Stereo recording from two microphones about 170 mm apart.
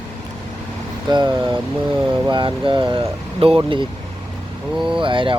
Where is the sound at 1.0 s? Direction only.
25° right (ahead or behind).